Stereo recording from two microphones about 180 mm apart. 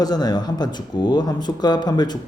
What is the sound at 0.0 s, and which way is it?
A man's voice, 20° left (ahead or behind).